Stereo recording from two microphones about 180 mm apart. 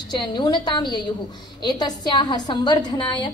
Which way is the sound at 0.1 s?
25° left (ahead or behind).